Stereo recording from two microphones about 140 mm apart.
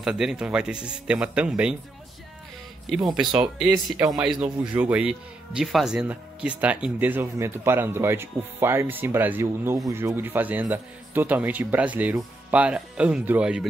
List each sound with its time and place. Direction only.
0.0 s speech: 5° right (ahead or behind)
3.1 s speech: 5° right (ahead or behind)